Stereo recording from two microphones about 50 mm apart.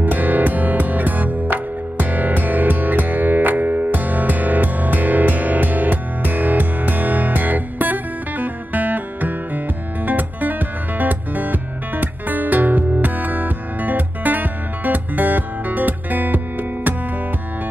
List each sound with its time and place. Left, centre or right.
0.0 s music: right